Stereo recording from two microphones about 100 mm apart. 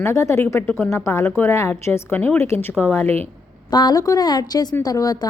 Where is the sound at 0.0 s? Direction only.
30° left (ahead or behind).